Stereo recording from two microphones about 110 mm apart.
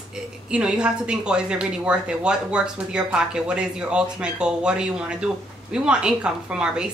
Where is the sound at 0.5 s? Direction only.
10° right (ahead or behind).